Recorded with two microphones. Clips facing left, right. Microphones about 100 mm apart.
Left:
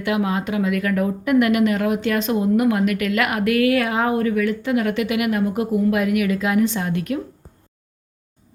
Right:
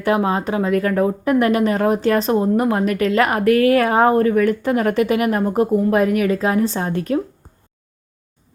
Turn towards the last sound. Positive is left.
turn(degrees=-35)  # may be behind; listen again after turning